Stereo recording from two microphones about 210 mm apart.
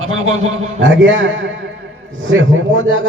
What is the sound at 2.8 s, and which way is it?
Speech, 65° right (ahead or behind).